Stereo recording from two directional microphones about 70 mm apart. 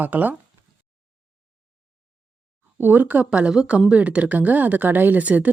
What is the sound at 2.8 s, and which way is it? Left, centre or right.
Speech, right.